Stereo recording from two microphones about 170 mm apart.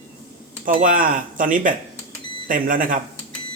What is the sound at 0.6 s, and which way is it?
A man's voice, 50° right (ahead or behind).